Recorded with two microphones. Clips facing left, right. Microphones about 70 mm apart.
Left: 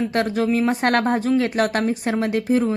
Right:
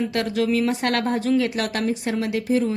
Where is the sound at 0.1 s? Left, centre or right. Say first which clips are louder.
Left 2 dB; left.